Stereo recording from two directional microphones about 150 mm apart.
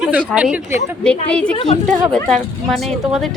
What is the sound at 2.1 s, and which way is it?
A woman's voice, 5° left (ahead or behind).